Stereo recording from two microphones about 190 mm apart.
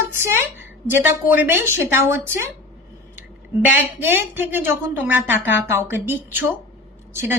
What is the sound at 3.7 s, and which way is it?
A woman's voice, 10° right (ahead or behind).